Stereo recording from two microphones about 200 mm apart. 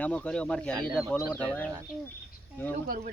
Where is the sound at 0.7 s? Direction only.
20° right (ahead or behind).